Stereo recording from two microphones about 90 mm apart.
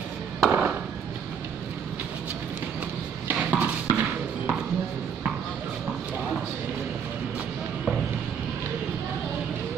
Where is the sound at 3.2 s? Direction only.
15° right (ahead or behind).